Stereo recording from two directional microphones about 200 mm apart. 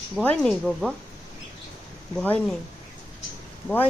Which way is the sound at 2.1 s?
5° left (ahead or behind).